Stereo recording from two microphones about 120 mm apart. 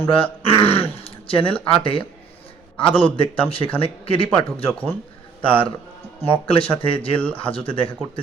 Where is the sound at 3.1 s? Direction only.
50° left (ahead or behind).